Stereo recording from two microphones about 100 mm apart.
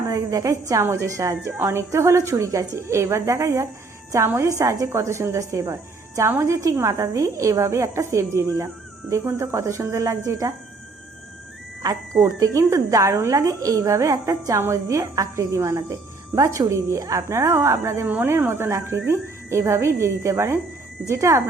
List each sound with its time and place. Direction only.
0.1 s a woman's voice: 35° right (ahead or behind)
12.1 s a woman's voice: 30° right (ahead or behind)